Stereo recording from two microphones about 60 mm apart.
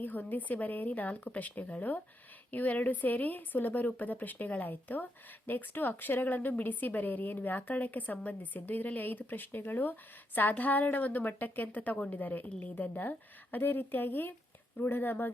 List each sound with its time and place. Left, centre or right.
0.0 s a woman's voice: left